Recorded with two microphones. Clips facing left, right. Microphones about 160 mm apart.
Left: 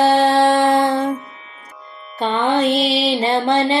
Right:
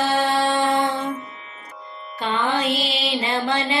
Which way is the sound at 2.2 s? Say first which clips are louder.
Left 6 dB; 30° left (ahead or behind).